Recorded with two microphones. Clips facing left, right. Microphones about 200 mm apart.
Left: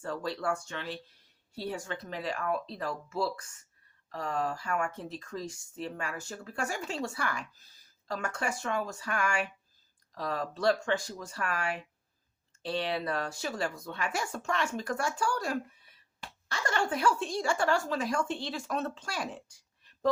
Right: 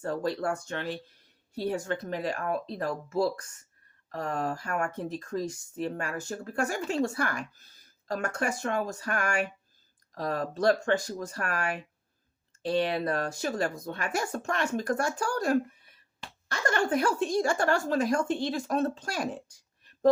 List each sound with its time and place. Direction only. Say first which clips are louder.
0.0 s speech: right 4 dB; 45° right (ahead or behind)
16.9 s speech: right 4 dB; 40° right (ahead or behind)